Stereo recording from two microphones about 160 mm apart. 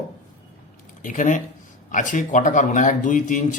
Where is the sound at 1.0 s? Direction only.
55° left (ahead or behind).